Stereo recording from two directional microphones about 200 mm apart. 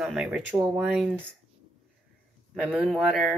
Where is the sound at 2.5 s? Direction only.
5° right (ahead or behind).